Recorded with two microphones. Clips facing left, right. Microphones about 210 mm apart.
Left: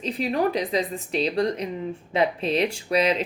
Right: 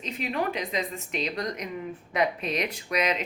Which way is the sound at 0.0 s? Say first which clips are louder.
Left 6 dB; 35° left (ahead or behind).